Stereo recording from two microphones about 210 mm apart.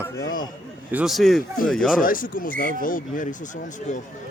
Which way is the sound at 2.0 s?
40° left (ahead or behind).